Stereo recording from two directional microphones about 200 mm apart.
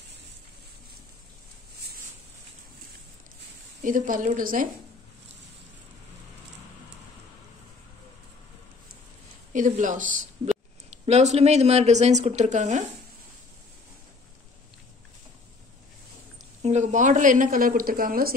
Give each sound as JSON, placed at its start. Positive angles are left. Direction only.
{"t": 3.8, "sound": "speech", "side_deg": -40}
{"t": 9.5, "sound": "speech", "side_deg": -40}
{"t": 16.6, "sound": "a woman's voice", "side_deg": -35}